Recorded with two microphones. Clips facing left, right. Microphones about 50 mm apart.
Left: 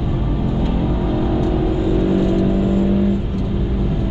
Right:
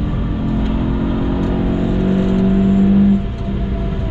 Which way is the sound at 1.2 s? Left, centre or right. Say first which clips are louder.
Even; centre.